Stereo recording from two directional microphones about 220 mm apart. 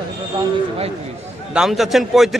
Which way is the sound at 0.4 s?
25° right (ahead or behind).